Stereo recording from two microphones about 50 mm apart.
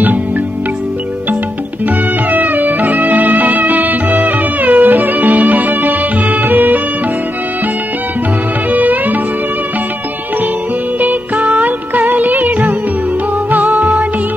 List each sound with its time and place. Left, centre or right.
2.3 s music: right
8.7 s music: right
11.0 s music: right